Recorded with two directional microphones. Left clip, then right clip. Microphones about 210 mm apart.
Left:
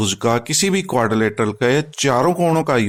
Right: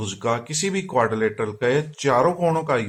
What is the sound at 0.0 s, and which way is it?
A man's voice, 50° left (ahead or behind).